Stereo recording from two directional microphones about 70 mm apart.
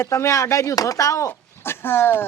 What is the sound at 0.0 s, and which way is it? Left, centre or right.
Speech, left.